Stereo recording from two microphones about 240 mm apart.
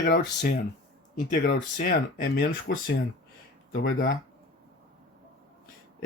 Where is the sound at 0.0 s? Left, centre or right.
Left.